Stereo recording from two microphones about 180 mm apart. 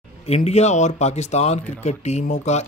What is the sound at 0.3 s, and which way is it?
Speech, 35° left (ahead or behind).